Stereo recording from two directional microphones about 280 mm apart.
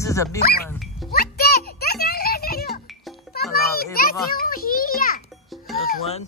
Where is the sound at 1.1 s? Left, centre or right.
Left.